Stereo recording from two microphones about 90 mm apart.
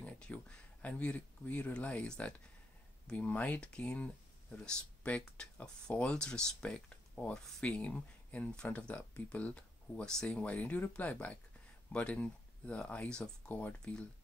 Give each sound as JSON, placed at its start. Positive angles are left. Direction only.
{"t": 0.0, "sound": "speech", "side_deg": 10}